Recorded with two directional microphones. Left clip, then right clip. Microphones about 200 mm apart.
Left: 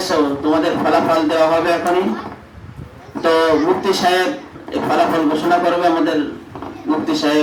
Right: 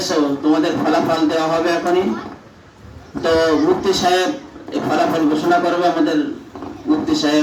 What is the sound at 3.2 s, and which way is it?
A man's voice, 30° left (ahead or behind).